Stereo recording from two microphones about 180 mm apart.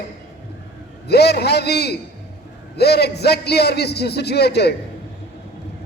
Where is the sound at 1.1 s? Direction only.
65° left (ahead or behind).